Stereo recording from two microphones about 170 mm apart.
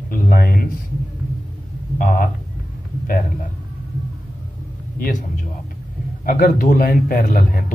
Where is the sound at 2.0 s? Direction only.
55° left (ahead or behind).